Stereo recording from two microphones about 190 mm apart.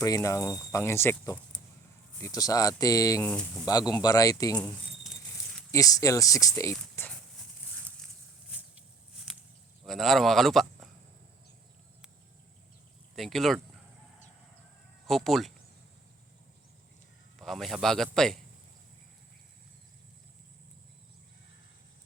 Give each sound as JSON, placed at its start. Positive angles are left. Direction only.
{"t": 0.0, "sound": "speech", "side_deg": 15}
{"t": 3.7, "sound": "speech", "side_deg": 20}
{"t": 4.5, "sound": "a sound", "side_deg": 5}
{"t": 5.7, "sound": "speech", "side_deg": 15}
{"t": 8.4, "sound": "a sound", "side_deg": -5}
{"t": 9.8, "sound": "speech", "side_deg": 0}
{"t": 13.1, "sound": "a man's voice", "side_deg": 0}
{"t": 15.0, "sound": "speech", "side_deg": 0}
{"t": 17.3, "sound": "a man's voice", "side_deg": 0}